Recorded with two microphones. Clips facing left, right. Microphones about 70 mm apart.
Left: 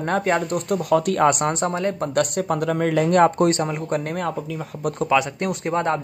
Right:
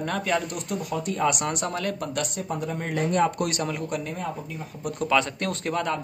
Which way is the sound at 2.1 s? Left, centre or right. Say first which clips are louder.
Left 8 dB; left.